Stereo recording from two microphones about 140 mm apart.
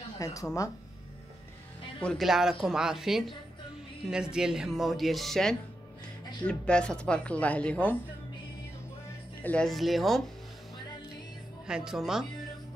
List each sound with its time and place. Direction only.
0.2 s speech: 25° left (ahead or behind)
2.0 s speech: 5° left (ahead or behind)
9.4 s speech: 10° left (ahead or behind)
11.6 s speech: 5° right (ahead or behind)